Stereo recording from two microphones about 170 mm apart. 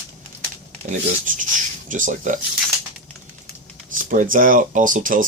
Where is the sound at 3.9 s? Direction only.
50° right (ahead or behind).